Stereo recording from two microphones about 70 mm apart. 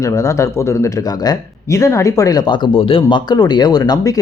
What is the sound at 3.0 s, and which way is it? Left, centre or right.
Speech, left.